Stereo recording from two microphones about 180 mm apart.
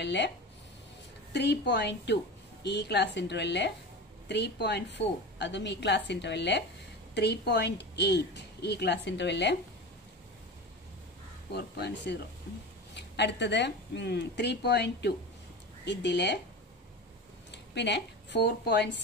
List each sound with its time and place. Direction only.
0.0 s a woman's voice: 75° left (ahead or behind)
1.3 s a woman's voice: 70° left (ahead or behind)
11.5 s a woman's voice: 65° left (ahead or behind)
17.5 s speech: 70° left (ahead or behind)